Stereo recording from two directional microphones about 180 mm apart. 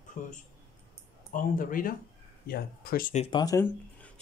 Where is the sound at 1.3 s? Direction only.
50° left (ahead or behind).